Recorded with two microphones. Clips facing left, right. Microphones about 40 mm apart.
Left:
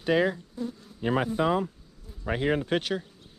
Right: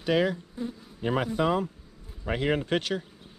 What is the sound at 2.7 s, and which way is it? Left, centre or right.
Speech, centre.